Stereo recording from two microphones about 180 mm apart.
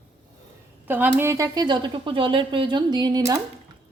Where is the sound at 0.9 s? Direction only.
10° right (ahead or behind).